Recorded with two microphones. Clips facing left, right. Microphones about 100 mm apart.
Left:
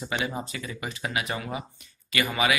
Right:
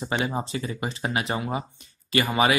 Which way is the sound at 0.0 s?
35° right (ahead or behind).